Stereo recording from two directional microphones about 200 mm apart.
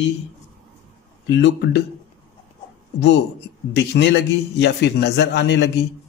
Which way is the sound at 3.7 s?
60° left (ahead or behind).